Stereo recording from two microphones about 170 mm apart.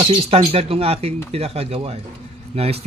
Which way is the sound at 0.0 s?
35° right (ahead or behind).